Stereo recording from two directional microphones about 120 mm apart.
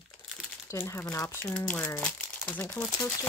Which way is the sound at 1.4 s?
10° left (ahead or behind).